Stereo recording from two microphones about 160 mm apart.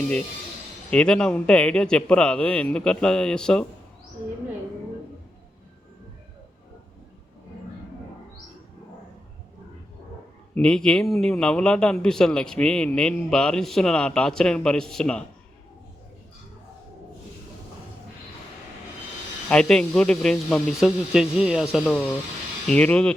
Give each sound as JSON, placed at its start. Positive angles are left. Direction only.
{"t": 0.9, "sound": "a man's voice", "side_deg": 5}
{"t": 10.5, "sound": "a man's voice", "side_deg": 5}
{"t": 19.5, "sound": "a man's voice", "side_deg": 5}
{"t": 22.6, "sound": "speech", "side_deg": 5}